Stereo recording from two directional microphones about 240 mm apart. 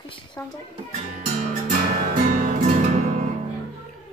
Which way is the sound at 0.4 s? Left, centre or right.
Centre.